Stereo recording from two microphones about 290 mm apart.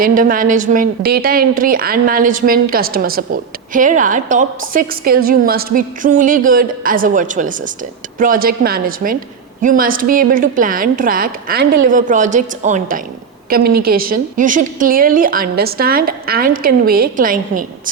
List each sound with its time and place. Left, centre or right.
0.0 s a woman's voice: right